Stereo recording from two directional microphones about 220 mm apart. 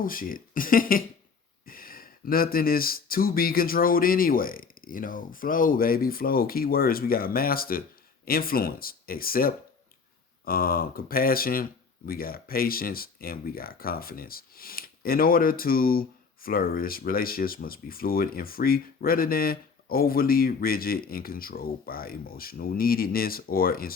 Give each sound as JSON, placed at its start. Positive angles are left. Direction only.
{"t": 0.0, "sound": "speech", "side_deg": 40}